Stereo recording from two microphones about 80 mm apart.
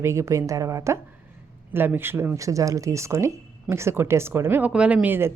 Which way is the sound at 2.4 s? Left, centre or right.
Right.